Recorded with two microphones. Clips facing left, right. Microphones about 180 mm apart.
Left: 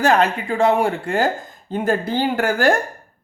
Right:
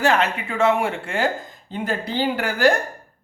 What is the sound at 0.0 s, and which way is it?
A man's voice, 40° left (ahead or behind).